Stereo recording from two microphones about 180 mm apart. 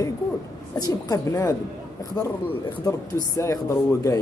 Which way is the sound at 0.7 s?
20° left (ahead or behind).